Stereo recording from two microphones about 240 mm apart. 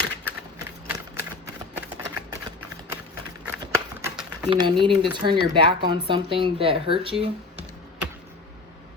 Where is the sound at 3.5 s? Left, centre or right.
Centre.